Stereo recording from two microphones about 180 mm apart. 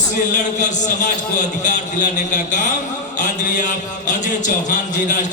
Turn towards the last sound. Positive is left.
turn(degrees=45)  # may be behind; listen again after turning